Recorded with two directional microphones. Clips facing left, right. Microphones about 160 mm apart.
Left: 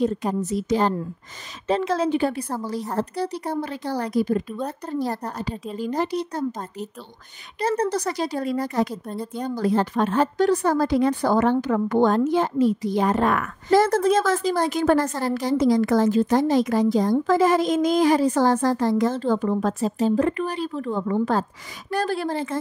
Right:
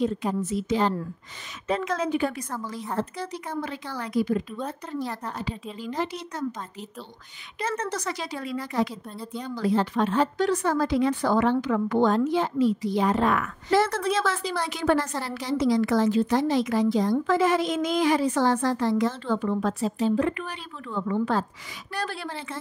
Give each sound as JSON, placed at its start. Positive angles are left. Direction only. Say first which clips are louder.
{"t": 0.0, "sound": "a woman's voice", "louder": "left 3 dB", "side_deg": 45}
{"t": 1.7, "sound": "a woman's voice", "louder": "left 4 dB", "side_deg": 30}